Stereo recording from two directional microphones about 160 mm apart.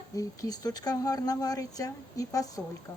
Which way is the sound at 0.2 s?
25° left (ahead or behind).